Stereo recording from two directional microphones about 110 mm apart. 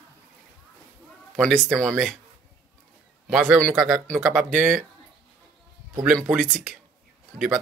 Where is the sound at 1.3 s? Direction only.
5° left (ahead or behind).